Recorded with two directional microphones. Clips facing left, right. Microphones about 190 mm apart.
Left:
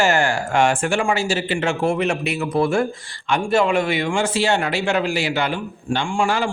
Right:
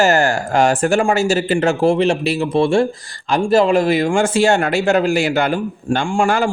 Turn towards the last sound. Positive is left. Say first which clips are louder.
# right 4 dB
turn(degrees=-50)  # may be behind; listen again after turning